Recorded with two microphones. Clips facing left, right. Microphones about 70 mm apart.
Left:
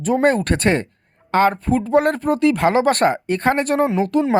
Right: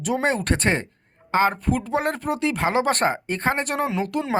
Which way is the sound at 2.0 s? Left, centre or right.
Left.